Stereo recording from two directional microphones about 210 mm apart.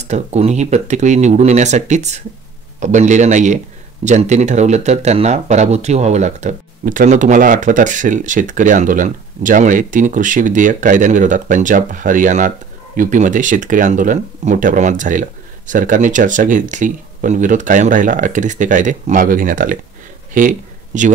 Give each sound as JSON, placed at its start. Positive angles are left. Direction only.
{"t": 0.0, "sound": "speech", "side_deg": -30}